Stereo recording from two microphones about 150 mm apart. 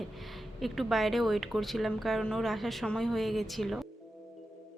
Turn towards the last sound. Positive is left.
turn(degrees=0)  # may be behind; listen again after turning